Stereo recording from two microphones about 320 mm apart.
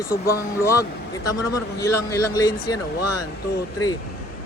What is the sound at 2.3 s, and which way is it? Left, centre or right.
Speech, centre.